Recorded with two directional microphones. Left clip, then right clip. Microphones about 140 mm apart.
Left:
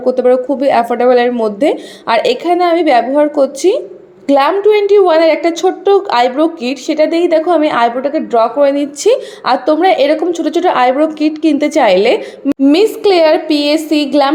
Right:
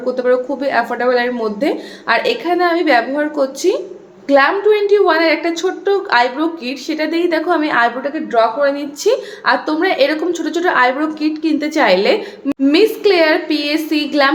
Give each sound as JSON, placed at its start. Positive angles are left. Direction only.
{"t": 0.0, "sound": "a woman's voice", "side_deg": 35}